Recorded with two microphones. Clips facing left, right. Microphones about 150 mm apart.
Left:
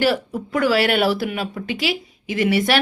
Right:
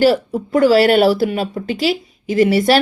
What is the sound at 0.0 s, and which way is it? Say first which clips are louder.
Speech: right 6 dB; 35° right (ahead or behind).